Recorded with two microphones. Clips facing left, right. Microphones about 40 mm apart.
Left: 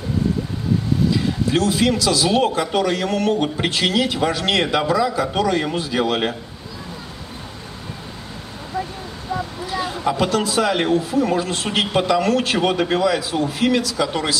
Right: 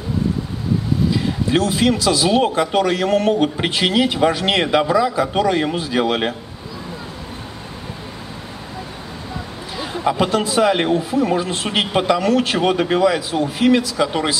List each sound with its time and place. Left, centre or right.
1.5 s a man's voice: centre
9.8 s a man's voice: centre
12.5 s a man's voice: centre